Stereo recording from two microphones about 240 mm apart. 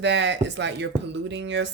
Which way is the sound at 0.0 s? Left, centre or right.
Right.